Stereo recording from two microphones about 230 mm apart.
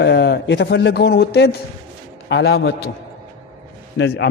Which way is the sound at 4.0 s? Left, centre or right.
Left.